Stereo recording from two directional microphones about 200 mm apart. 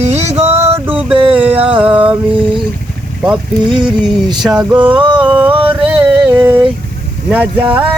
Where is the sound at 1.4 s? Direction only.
5° right (ahead or behind).